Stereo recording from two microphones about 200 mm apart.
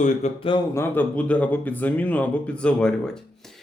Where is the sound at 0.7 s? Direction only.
10° left (ahead or behind).